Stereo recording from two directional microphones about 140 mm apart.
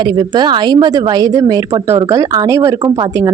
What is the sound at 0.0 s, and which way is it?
Speech, 30° right (ahead or behind).